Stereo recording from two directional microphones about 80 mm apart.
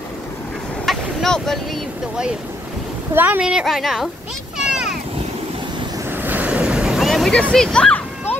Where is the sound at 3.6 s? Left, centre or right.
Centre.